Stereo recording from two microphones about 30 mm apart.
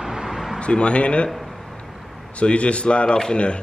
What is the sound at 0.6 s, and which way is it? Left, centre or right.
Speech, left.